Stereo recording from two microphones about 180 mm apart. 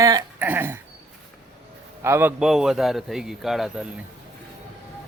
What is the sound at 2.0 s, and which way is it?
Speech, 15° right (ahead or behind).